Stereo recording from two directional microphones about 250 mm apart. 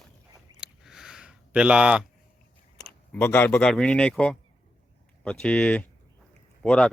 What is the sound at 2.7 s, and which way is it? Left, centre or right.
Speech, centre.